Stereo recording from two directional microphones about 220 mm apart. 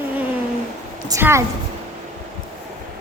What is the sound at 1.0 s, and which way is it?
Speech, 15° right (ahead or behind).